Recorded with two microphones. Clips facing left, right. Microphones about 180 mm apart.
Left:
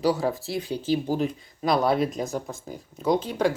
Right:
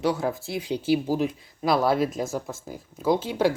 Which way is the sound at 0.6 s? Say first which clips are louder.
Right 3 dB; 15° right (ahead or behind).